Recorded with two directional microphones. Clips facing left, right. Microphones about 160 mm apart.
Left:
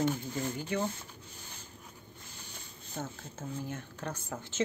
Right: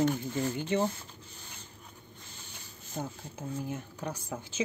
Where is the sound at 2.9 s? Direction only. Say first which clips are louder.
Right 2 dB; 15° right (ahead or behind).